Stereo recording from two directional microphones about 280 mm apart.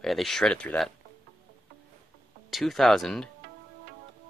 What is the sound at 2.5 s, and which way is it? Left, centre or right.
Speech, centre.